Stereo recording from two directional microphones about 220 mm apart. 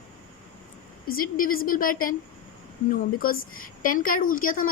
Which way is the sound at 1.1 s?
40° left (ahead or behind).